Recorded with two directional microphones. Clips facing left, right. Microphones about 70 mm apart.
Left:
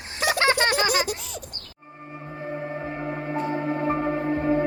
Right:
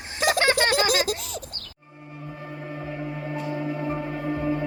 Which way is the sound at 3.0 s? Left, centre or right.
Left.